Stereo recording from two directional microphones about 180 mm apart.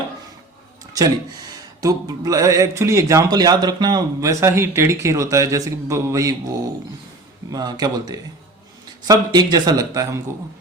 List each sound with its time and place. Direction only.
1.8 s speech: 20° right (ahead or behind)